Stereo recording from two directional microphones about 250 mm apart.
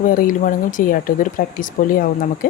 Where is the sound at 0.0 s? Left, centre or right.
Left.